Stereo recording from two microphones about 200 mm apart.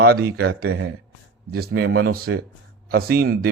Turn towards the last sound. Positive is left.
turn(degrees=-50)  # may be behind; listen again after turning